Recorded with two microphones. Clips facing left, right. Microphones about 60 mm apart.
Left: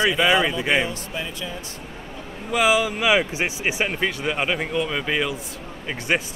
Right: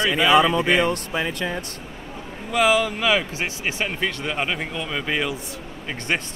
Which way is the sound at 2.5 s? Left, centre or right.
Centre.